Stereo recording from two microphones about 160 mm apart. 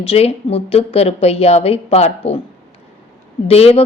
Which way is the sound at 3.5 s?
40° left (ahead or behind).